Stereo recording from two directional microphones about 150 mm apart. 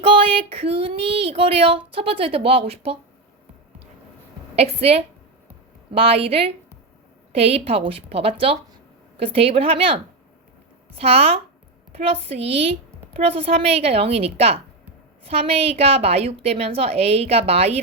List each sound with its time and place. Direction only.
0.0 s a woman's voice: 40° right (ahead or behind)
4.5 s a woman's voice: 45° right (ahead or behind)